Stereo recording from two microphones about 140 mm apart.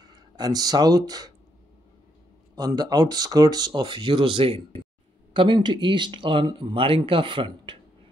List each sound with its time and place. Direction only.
0.0 s speech: 30° right (ahead or behind)
2.5 s speech: 30° right (ahead or behind)